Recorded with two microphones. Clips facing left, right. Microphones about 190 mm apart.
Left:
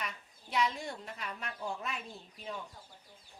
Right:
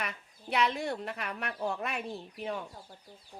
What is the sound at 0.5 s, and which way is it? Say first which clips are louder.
Speech: right 4 dB; 65° right (ahead or behind).